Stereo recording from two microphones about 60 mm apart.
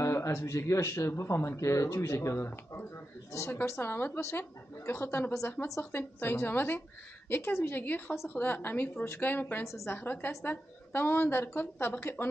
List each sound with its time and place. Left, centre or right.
0.0 s speech: left
3.3 s speech: left
3.7 s speech: left
4.2 s speech: left
9.7 s a woman's voice: left
9.9 s speech: left